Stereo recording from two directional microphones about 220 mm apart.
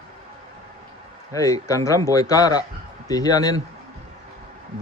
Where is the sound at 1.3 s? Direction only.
15° left (ahead or behind).